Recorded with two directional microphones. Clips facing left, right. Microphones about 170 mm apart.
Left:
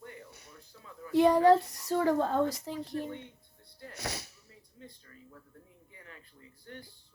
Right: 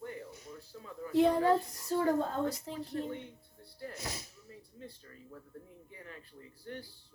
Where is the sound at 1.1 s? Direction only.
85° left.